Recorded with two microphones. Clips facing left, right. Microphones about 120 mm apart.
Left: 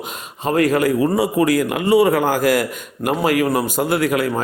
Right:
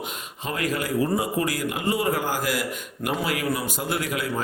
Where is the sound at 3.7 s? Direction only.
65° left (ahead or behind).